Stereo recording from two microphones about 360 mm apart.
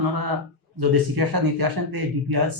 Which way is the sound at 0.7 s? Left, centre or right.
Right.